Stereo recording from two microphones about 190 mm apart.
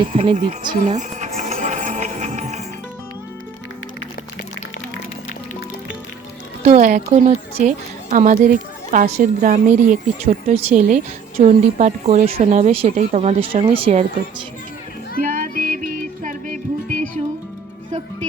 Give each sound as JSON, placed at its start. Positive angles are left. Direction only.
{"t": 0.0, "sound": "music", "side_deg": -30}
{"t": 6.7, "sound": "a woman's voice", "side_deg": -40}
{"t": 15.2, "sound": "music", "side_deg": -45}